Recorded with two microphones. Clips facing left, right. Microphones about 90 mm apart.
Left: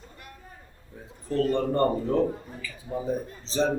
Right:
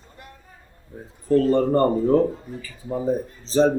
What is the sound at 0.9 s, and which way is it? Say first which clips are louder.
Speech: right 8 dB; 35° right (ahead or behind).